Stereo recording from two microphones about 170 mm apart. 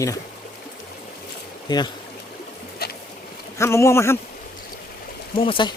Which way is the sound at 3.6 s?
15° left (ahead or behind).